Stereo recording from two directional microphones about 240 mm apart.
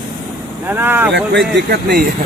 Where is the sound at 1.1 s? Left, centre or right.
Right.